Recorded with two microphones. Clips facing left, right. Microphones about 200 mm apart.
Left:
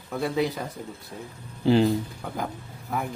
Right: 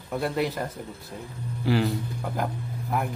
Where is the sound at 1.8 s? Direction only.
Centre (ahead or behind).